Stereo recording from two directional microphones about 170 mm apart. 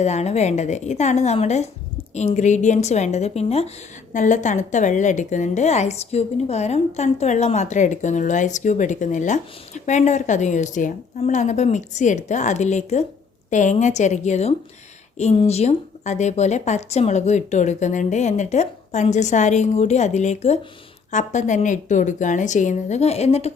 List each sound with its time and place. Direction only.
0.0 s a woman's voice: 40° left (ahead or behind)